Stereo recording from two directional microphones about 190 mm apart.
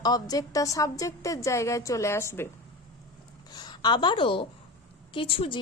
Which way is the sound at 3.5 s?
20° left (ahead or behind).